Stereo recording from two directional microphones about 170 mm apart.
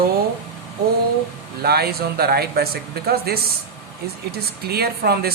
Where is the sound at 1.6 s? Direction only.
65° right (ahead or behind).